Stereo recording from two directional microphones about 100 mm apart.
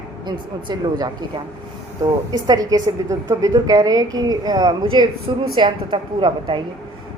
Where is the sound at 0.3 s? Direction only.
45° right (ahead or behind).